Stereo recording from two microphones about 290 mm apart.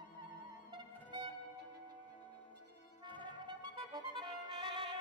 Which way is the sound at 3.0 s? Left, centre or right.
Centre.